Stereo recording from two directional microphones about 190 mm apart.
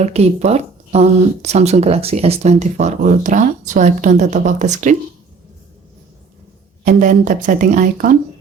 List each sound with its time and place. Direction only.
0.0 s speech: 35° right (ahead or behind)
6.8 s speech: 40° right (ahead or behind)